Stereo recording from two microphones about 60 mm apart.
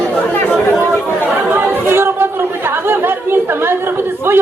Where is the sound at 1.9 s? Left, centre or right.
Right.